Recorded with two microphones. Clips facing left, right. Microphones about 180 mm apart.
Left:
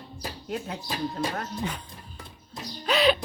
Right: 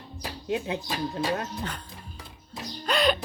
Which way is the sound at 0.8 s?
5° left (ahead or behind).